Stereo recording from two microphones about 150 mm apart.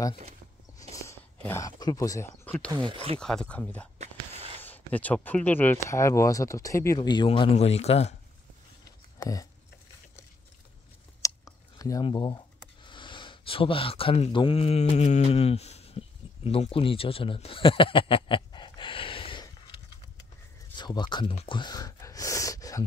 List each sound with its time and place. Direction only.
0.9 s a sound: 20° left (ahead or behind)
2.9 s speech: 40° right (ahead or behind)
3.2 s speech: 5° left (ahead or behind); by 8.2 s 45° left (ahead or behind)
8.8 s a sound: 25° left (ahead or behind)
11.2 s clicking: 25° left (ahead or behind)
12.8 s speech: 30° left (ahead or behind)
20.7 s speech: 30° left (ahead or behind)